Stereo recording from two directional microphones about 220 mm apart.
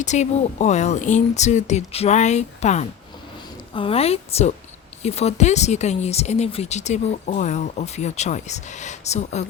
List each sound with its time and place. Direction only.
0.0 s speech: 30° left (ahead or behind)